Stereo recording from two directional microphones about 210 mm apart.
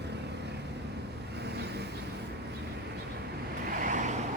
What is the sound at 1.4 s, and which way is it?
Vehicle, 50° right (ahead or behind).